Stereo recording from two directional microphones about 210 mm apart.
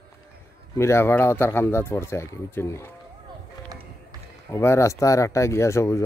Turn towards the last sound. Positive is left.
turn(degrees=15)  # may be behind; listen again after turning